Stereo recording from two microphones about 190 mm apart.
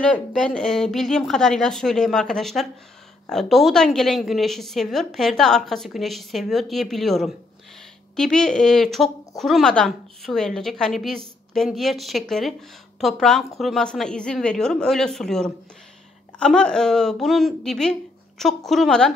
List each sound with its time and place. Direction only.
0.0 s a woman's voice: 5° left (ahead or behind)